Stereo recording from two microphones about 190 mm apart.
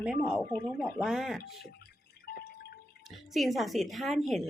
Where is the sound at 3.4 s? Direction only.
Centre (ahead or behind).